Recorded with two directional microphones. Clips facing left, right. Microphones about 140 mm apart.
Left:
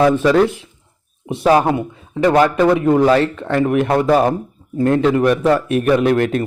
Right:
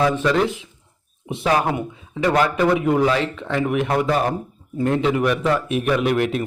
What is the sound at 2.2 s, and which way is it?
Speech, 30° left (ahead or behind).